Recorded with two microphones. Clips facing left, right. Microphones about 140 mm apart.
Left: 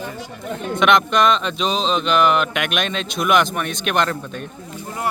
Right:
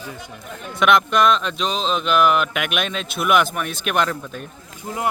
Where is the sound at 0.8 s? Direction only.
5° right (ahead or behind).